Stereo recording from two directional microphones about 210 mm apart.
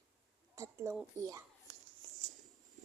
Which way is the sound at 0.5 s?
15° right (ahead or behind).